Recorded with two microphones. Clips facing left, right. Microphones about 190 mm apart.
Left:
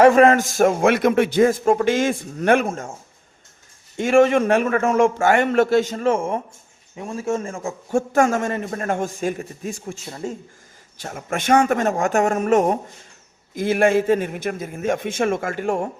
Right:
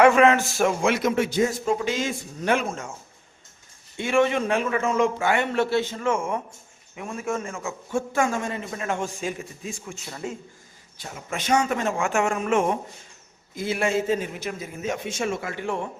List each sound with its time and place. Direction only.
0.0 s a man's voice: 35° left (ahead or behind)
3.9 s a man's voice: 45° left (ahead or behind)
10.1 s a man's voice: 30° left (ahead or behind)
11.0 s a man's voice: 50° left (ahead or behind)
13.6 s a man's voice: 55° left (ahead or behind)